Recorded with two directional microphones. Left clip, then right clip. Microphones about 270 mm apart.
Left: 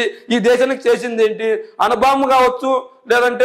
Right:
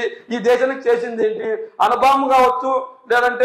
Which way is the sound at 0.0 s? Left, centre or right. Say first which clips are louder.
Left 4 dB; left.